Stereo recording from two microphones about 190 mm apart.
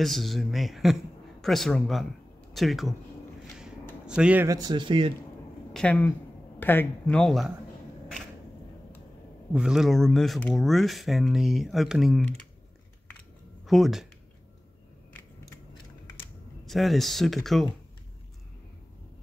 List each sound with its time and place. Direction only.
0.0 s speech: centre (ahead or behind)
4.0 s speech: 5° right (ahead or behind)
4.6 s speech: 25° right (ahead or behind)
5.7 s speech: 5° left (ahead or behind)
9.5 s speech: 5° right (ahead or behind)
13.7 s speech: centre (ahead or behind)
16.6 s speech: centre (ahead or behind)